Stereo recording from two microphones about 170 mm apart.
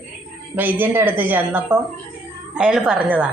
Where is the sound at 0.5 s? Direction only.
10° right (ahead or behind).